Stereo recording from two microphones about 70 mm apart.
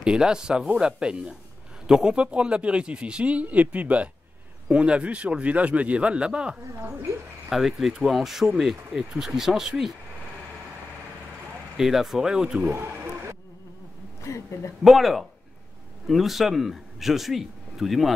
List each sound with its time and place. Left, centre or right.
0.0 s speech: centre
11.7 s speech: centre
12.7 s a sound: right
14.2 s speech: left
14.8 s speech: centre